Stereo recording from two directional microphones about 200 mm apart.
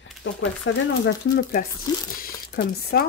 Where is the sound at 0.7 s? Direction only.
65° left (ahead or behind).